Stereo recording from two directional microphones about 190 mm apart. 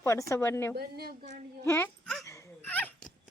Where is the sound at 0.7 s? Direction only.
55° right (ahead or behind).